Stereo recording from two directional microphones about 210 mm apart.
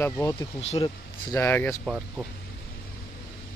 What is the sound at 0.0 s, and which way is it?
Speech, 15° left (ahead or behind).